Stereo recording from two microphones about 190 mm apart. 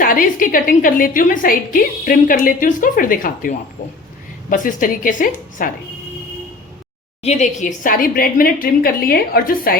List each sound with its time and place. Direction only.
0.0 s a woman's voice: 45° left (ahead or behind)
7.2 s a woman's voice: 35° left (ahead or behind)